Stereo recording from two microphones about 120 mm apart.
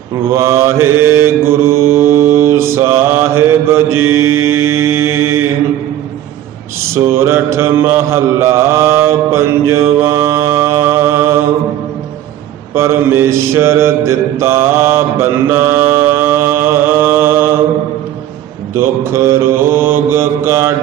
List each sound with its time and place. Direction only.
0.3 s mantra: 25° right (ahead or behind)
6.9 s mantra: 20° right (ahead or behind)
12.7 s mantra: 20° right (ahead or behind)
18.8 s mantra: 20° right (ahead or behind)